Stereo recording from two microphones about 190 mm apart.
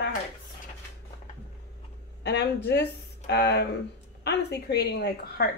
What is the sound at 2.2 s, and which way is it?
A woman's voice, 60° left (ahead or behind).